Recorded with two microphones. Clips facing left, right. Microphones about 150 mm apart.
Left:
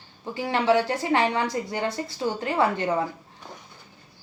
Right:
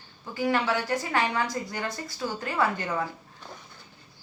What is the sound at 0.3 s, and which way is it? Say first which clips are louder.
A woman's voice: left 4 dB; 25° left (ahead or behind).